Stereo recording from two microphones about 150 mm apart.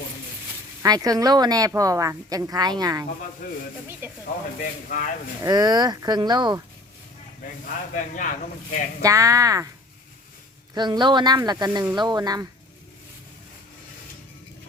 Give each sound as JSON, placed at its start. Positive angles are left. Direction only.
{"t": 0.8, "sound": "a woman's voice", "side_deg": -25}
{"t": 4.6, "sound": "speech", "side_deg": 65}
{"t": 5.4, "sound": "a woman's voice", "side_deg": -25}
{"t": 7.4, "sound": "speech", "side_deg": 65}
{"t": 9.0, "sound": "a woman's voice", "side_deg": -20}
{"t": 10.8, "sound": "a woman's voice", "side_deg": -30}